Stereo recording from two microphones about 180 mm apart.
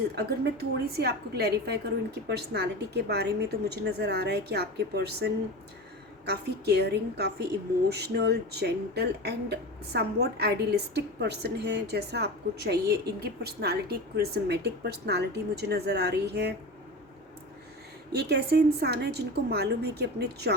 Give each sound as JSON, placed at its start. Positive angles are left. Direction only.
{"t": 0.2, "sound": "a woman's voice", "side_deg": -60}
{"t": 18.1, "sound": "a woman's voice", "side_deg": -65}